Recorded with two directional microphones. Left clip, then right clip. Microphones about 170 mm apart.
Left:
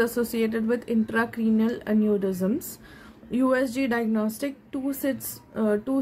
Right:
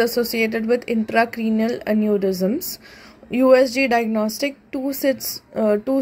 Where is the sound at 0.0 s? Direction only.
20° right (ahead or behind).